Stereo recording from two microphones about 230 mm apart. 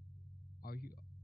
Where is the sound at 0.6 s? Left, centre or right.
Left.